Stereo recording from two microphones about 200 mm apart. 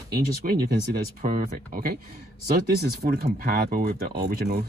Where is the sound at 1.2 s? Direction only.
45° right (ahead or behind).